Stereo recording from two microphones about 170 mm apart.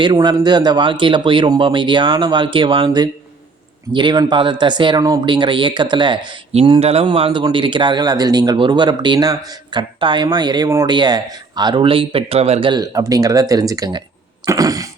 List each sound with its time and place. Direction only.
0.0 s speech: 25° right (ahead or behind)
14.4 s throat clearing: 20° right (ahead or behind)